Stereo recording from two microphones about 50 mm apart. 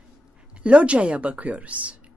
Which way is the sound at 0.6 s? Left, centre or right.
Right.